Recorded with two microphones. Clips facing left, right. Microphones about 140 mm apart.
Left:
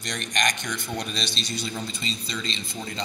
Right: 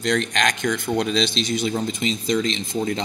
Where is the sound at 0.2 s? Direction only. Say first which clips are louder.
Right 5 dB; 90° right.